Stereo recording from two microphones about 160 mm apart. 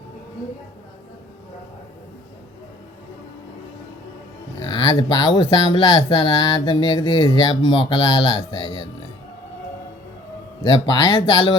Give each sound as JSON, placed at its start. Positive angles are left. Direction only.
{"t": 4.6, "sound": "speech", "side_deg": 30}
{"t": 10.6, "sound": "speech", "side_deg": 25}